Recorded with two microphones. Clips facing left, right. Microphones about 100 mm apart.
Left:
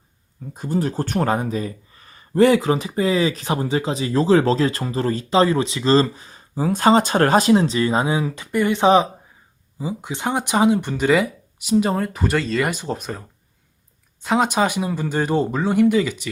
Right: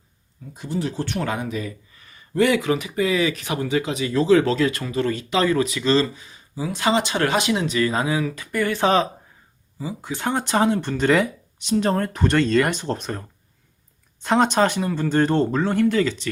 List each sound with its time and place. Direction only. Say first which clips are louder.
0.5 s speech: left 4 dB; 45° left (ahead or behind); by 16.3 s 10° left (ahead or behind)